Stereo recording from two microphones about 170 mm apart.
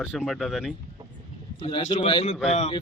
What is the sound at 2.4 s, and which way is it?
Speech, 40° left (ahead or behind).